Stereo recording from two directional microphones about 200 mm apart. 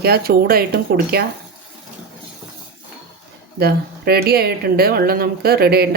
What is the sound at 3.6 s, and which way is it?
Speech, 50° right (ahead or behind).